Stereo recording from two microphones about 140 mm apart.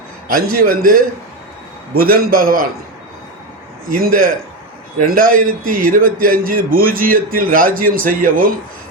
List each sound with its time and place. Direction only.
0.3 s a man's voice: 90° right
3.8 s a man's voice: 90° right